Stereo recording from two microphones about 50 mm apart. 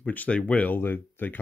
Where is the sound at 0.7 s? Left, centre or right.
Left.